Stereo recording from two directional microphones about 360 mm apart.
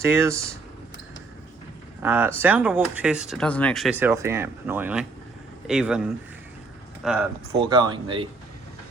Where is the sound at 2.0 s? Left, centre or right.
Centre.